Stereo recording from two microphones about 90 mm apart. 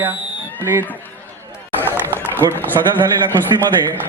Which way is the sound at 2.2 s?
25° right (ahead or behind).